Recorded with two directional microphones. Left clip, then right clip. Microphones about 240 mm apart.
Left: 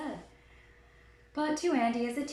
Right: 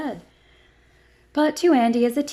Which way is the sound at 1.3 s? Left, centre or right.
Right.